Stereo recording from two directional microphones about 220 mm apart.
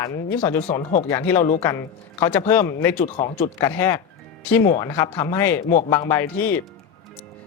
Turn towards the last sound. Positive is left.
turn(degrees=10)  # may be behind; listen again after turning